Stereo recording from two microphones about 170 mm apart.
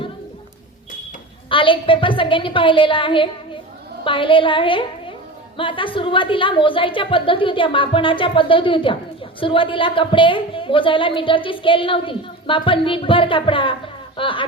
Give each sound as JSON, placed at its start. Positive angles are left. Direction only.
{"t": 1.5, "sound": "a woman's voice", "side_deg": 30}